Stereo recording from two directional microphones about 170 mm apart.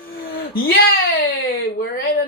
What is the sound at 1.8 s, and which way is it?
Speech, 65° left (ahead or behind).